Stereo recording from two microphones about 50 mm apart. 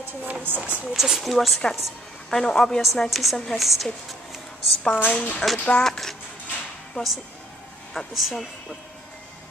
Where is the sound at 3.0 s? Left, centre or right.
Centre.